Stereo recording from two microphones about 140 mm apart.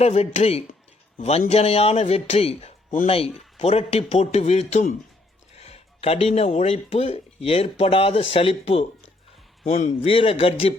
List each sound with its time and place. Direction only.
0.0 s speech: 55° left (ahead or behind)